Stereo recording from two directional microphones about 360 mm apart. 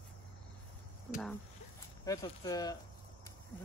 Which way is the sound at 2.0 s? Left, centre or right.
Centre.